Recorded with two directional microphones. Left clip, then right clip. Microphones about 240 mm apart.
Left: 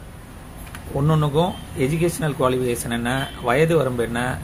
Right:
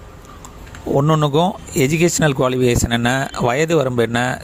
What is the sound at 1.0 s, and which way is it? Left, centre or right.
Speech, right.